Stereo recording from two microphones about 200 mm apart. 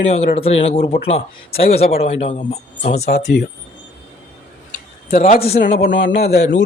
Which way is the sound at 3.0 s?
55° left (ahead or behind).